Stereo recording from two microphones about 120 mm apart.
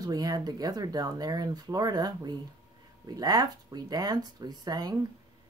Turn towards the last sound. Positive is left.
turn(degrees=-35)  # may be behind; listen again after turning